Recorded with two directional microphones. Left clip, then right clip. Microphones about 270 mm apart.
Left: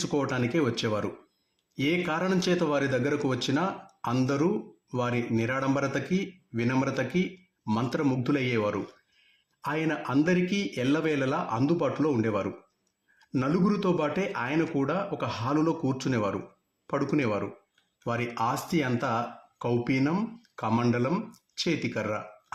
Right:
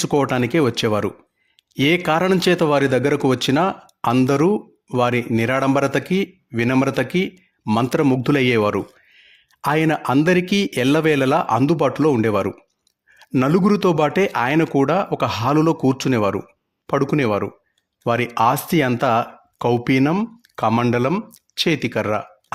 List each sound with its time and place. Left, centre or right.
0.0 s speech: right